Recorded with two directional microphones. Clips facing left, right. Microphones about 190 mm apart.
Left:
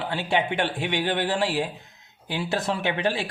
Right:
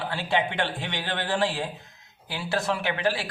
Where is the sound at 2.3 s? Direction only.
20° left (ahead or behind).